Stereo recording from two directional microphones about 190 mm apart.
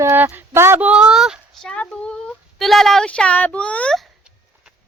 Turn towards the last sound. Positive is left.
turn(degrees=5)  # may be behind; listen again after turning